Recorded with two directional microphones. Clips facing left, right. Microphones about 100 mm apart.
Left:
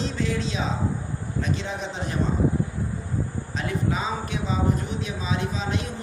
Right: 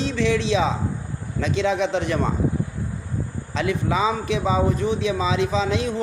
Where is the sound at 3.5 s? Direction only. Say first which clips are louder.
Right 5 dB; 90° right.